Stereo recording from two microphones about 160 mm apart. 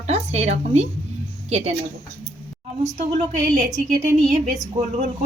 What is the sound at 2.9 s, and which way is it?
A woman's voice, 50° right (ahead or behind).